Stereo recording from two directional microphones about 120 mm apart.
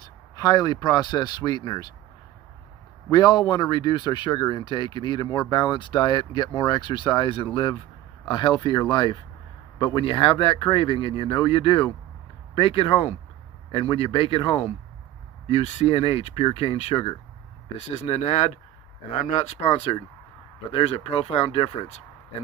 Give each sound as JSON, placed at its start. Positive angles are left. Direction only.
{"t": 0.0, "sound": "speech", "side_deg": 30}
{"t": 3.1, "sound": "speech", "side_deg": 35}
{"t": 17.7, "sound": "speech", "side_deg": 65}